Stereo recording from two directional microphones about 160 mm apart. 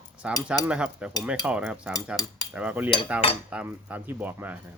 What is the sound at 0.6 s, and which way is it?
Speech, 5° right (ahead or behind).